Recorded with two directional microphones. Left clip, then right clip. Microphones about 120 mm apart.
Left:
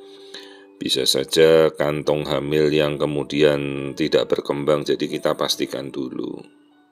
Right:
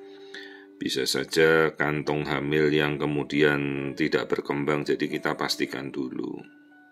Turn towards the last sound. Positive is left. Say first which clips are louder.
# left 4 dB
turn(degrees=25)  # may be behind; listen again after turning